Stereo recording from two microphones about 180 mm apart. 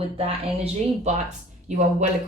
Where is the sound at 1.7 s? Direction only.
40° right (ahead or behind).